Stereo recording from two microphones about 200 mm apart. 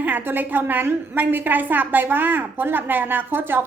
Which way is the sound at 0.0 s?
10° right (ahead or behind).